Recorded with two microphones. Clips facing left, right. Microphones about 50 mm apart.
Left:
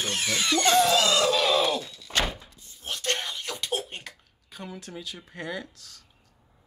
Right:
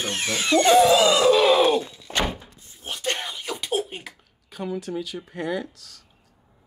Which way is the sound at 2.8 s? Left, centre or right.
Centre.